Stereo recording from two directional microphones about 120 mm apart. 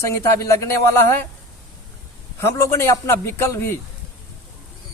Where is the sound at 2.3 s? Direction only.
25° left (ahead or behind).